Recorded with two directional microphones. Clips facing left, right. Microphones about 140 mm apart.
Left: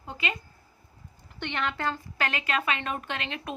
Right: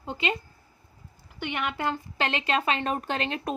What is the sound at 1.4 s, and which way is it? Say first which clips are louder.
A woman's voice: right 1 dB; 10° right (ahead or behind).